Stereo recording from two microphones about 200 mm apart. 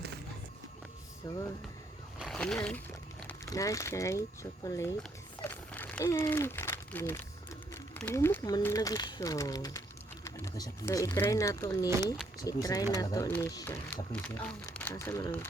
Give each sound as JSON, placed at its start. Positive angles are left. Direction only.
{"t": 1.2, "sound": "speech", "side_deg": 20}
{"t": 2.1, "sound": "slosh", "side_deg": 0}
{"t": 3.2, "sound": "speech", "side_deg": 15}
{"t": 4.9, "sound": "crumpling", "side_deg": 10}
{"t": 7.7, "sound": "speech", "side_deg": 10}